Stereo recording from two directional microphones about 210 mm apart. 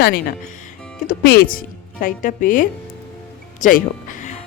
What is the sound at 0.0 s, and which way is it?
Speech, 50° left (ahead or behind).